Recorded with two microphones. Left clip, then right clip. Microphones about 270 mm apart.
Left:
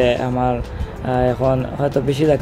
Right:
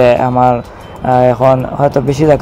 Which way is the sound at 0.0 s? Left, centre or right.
Centre.